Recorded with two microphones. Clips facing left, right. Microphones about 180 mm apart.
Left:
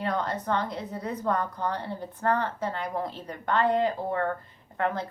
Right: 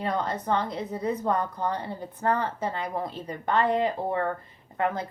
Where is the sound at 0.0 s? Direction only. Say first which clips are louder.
Right 1 dB; 20° right (ahead or behind).